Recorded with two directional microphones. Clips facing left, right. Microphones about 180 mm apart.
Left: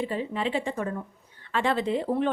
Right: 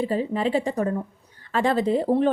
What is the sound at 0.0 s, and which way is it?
Speech, 40° right (ahead or behind).